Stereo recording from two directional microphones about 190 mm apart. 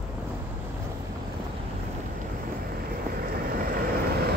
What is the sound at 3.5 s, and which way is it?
Vehicle, 50° right (ahead or behind).